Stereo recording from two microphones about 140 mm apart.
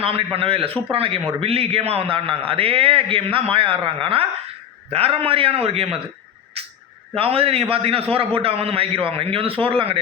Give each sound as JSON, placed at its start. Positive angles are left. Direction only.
{"t": 0.0, "sound": "a man's voice", "side_deg": -40}
{"t": 7.2, "sound": "a man's voice", "side_deg": -45}